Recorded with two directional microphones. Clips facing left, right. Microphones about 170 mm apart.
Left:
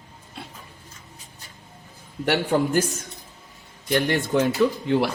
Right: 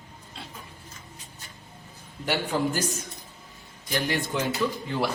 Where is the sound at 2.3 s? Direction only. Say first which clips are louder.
Left 5 dB; 60° left (ahead or behind).